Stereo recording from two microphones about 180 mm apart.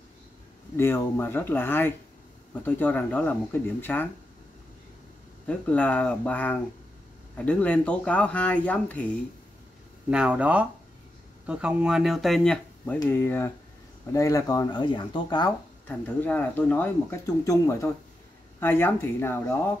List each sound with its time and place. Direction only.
0.7 s speech: 15° left (ahead or behind)
5.5 s speech: 5° left (ahead or behind)
10.0 s speech: 5° right (ahead or behind); by 15.5 s 25° left (ahead or behind)
15.9 s speech: 10° left (ahead or behind)